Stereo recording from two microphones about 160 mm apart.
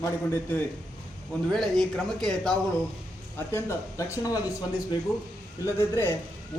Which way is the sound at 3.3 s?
15° left (ahead or behind).